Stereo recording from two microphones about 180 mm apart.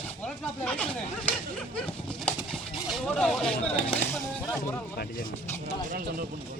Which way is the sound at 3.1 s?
5° left (ahead or behind).